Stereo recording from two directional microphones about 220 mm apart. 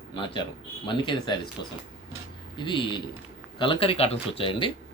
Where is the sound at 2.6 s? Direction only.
20° left (ahead or behind).